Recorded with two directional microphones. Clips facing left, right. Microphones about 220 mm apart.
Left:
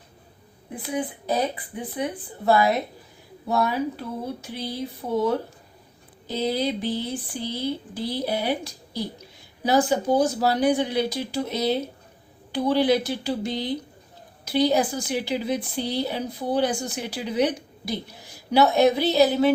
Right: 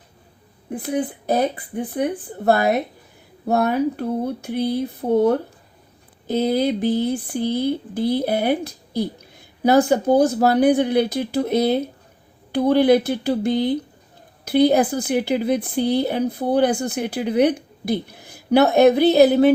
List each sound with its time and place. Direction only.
1.3 s a woman's voice: 55° right (ahead or behind)